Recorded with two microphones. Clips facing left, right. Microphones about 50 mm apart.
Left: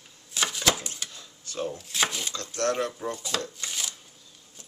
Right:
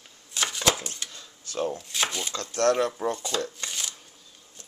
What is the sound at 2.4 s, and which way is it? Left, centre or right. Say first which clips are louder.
Speech: right 5 dB; right.